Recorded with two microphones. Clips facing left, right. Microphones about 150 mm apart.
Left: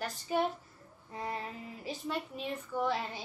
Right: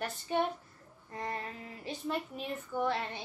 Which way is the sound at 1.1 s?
10° left (ahead or behind).